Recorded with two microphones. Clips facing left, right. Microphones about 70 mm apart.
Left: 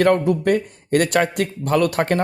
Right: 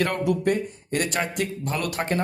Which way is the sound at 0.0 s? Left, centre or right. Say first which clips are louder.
Left 7 dB; left.